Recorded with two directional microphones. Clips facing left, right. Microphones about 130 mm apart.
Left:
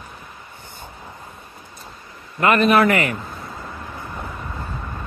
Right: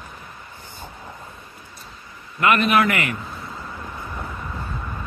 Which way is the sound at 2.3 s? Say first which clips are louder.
Left 3 dB; 35° left (ahead or behind).